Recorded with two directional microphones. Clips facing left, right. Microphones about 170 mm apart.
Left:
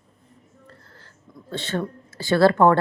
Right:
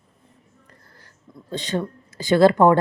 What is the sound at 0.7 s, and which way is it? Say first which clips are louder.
Speech: left 3 dB; 15° right (ahead or behind).